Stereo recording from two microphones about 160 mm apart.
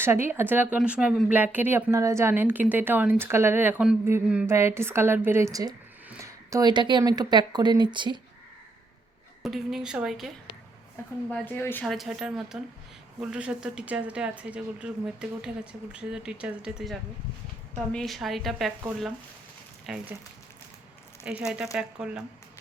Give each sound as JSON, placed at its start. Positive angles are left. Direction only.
{"t": 0.0, "sound": "a woman's voice", "side_deg": -15}
{"t": 9.4, "sound": "a woman's voice", "side_deg": 0}
{"t": 11.3, "sound": "a woman's voice", "side_deg": 10}
{"t": 11.9, "sound": "a woman's voice", "side_deg": 0}
{"t": 21.2, "sound": "a woman's voice", "side_deg": -5}